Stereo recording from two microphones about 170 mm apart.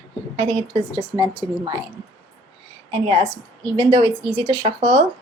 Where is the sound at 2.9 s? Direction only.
30° right (ahead or behind).